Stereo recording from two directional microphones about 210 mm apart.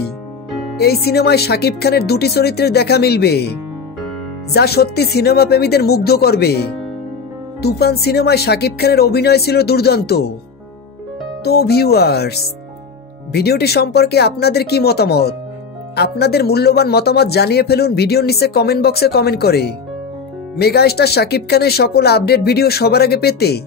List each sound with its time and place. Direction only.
0.7 s a man's voice: 50° left (ahead or behind)
4.6 s a man's voice: 50° left (ahead or behind)
11.4 s a man's voice: 50° left (ahead or behind)